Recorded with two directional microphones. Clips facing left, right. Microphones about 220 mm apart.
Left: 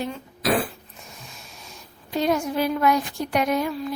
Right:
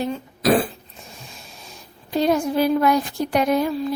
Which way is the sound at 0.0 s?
40° right (ahead or behind).